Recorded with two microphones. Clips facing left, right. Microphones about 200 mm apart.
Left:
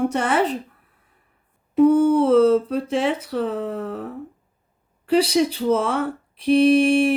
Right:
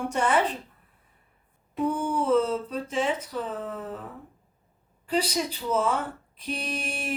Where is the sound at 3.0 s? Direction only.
70° left (ahead or behind).